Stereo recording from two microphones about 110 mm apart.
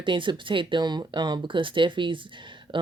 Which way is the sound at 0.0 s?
50° right (ahead or behind).